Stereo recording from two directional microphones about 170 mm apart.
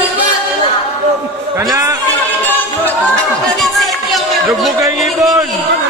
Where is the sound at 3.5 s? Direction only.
Centre (ahead or behind).